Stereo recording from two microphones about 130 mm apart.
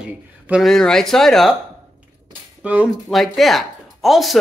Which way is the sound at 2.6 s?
10° right (ahead or behind).